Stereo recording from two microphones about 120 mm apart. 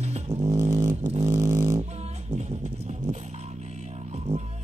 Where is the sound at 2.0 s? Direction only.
65° right (ahead or behind).